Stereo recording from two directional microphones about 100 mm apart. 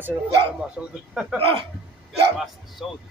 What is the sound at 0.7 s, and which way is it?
Speech, 10° right (ahead or behind).